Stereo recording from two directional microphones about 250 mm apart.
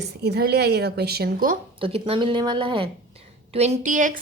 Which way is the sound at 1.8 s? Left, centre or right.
Right.